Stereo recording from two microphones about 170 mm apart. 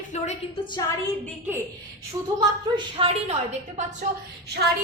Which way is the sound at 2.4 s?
30° right (ahead or behind).